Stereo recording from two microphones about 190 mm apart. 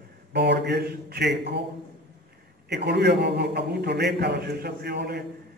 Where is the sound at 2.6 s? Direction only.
60° right (ahead or behind).